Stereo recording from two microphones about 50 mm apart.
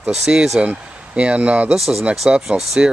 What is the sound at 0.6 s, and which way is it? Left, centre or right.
Speech, right.